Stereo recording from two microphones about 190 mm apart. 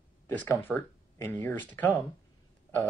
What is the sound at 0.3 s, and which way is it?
Speech, 10° left (ahead or behind).